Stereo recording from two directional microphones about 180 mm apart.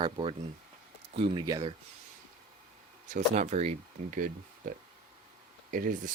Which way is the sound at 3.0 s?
40° right (ahead or behind).